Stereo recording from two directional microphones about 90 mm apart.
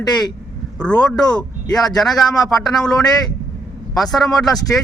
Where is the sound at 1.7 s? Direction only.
5° left (ahead or behind).